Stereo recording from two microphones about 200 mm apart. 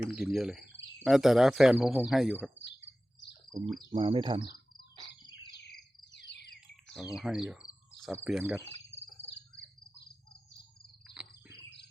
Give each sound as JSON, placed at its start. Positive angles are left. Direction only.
{"t": 0.1, "sound": "speech", "side_deg": 0}
{"t": 3.8, "sound": "speech", "side_deg": -25}
{"t": 6.1, "sound": "a sound", "side_deg": 60}
{"t": 6.9, "sound": "speech", "side_deg": 0}
{"t": 11.0, "sound": "bird", "side_deg": -5}